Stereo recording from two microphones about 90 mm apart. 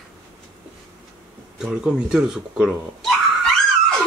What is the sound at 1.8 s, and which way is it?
Speech, 5° right (ahead or behind).